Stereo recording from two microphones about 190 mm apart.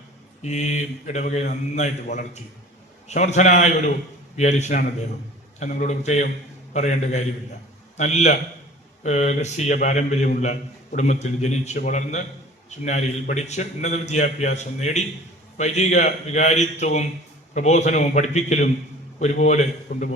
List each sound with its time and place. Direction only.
0.4 s a man's voice: 35° left (ahead or behind)